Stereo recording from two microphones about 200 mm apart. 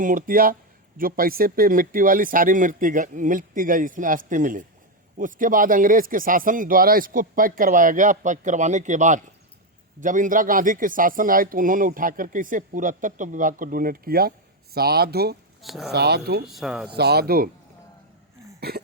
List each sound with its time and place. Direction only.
0.0 s a man's voice: 40° right (ahead or behind)
15.6 s speech: centre (ahead or behind)
15.9 s speech: 55° right (ahead or behind)
16.5 s speech: centre (ahead or behind)
17.0 s a man's voice: 55° right (ahead or behind)